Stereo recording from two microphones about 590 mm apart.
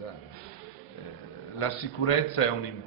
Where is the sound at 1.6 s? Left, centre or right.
Left.